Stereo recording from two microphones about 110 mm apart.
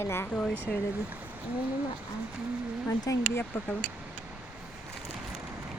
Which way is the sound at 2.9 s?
30° left (ahead or behind).